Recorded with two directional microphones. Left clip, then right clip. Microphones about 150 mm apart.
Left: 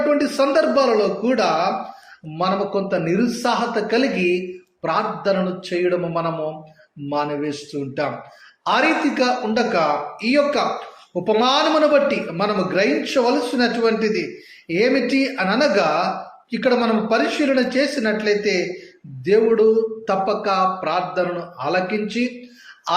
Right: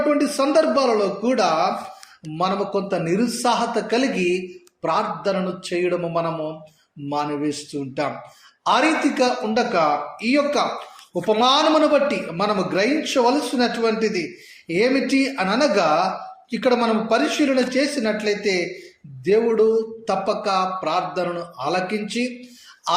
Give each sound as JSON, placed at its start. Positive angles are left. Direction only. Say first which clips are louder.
{"t": 0.1, "sound": "speech", "louder": "left 1 dB", "side_deg": -40}